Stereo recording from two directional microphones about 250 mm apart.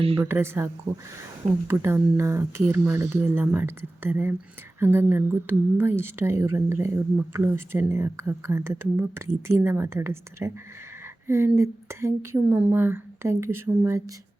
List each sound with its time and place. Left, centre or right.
0.0 s speech: right
0.3 s a woman's voice: centre